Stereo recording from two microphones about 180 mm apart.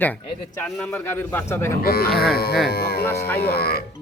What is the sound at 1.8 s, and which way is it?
Livestock, 55° left (ahead or behind).